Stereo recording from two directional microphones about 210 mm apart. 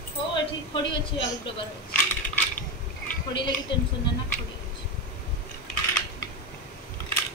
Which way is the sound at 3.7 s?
25° left (ahead or behind).